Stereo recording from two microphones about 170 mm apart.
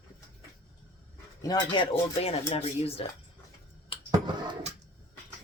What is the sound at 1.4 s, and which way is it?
Speech, 25° left (ahead or behind).